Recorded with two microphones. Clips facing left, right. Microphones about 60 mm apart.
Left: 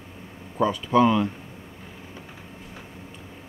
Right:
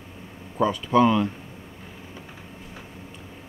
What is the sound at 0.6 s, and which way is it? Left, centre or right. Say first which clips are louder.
Speech: even; centre.